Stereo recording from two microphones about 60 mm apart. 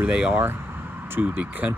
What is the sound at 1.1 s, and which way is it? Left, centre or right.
Speech, right.